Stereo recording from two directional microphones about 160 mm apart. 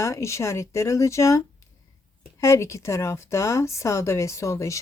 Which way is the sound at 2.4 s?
15° left (ahead or behind).